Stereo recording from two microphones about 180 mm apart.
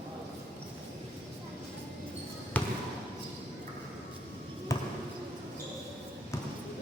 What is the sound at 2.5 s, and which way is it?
Basketball bounce, 10° left (ahead or behind).